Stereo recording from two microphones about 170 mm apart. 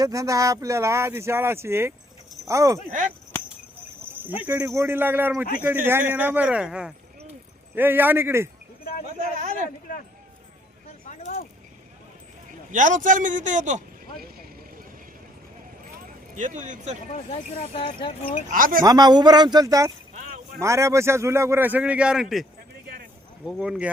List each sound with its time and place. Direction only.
0.0 s a man's voice: 20° right (ahead or behind)
4.4 s a man's voice: 15° right (ahead or behind)
8.8 s a sound: 60° left (ahead or behind)
11.1 s a sound: 45° left (ahead or behind)
12.5 s a sound: 50° right (ahead or behind)
16.3 s speech: 45° right (ahead or behind)
17.1 s speech: 40° left (ahead or behind)
18.5 s speech: 55° right (ahead or behind)
18.8 s a man's voice: 25° right (ahead or behind); by 22.4 s centre (ahead or behind)
23.5 s speech: centre (ahead or behind)